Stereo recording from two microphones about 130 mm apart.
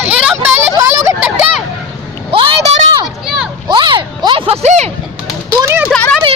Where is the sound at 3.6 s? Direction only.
35° right (ahead or behind); by 4.8 s 55° right (ahead or behind).